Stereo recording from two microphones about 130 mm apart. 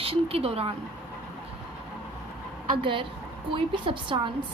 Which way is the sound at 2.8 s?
40° right (ahead or behind).